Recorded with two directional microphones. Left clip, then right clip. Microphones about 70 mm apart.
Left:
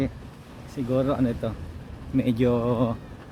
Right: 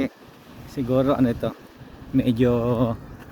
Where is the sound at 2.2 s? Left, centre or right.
Right.